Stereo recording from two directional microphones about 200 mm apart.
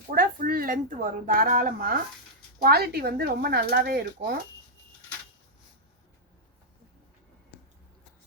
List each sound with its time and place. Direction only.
0.1 s speech: 45° right (ahead or behind)